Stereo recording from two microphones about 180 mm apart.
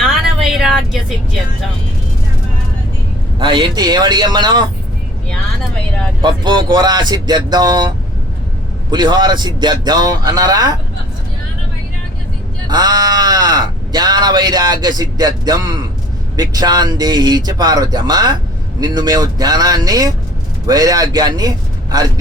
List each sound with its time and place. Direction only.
0.0 s a sound: centre (ahead or behind)
3.3 s speech: 25° right (ahead or behind)
6.2 s speech: 25° right (ahead or behind)
12.6 s speech: 20° right (ahead or behind)